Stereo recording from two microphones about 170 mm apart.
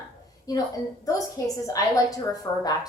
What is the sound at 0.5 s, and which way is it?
Speech, 20° left (ahead or behind).